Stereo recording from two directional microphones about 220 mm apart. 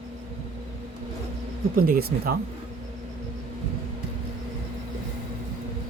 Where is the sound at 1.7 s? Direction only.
40° right (ahead or behind).